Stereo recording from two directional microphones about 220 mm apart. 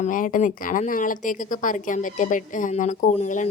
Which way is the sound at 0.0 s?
35° left (ahead or behind).